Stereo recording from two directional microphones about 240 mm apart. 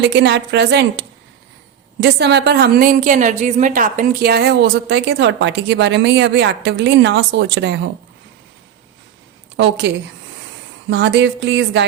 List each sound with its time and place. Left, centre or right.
0.0 s a woman's voice: right
9.6 s a woman's voice: right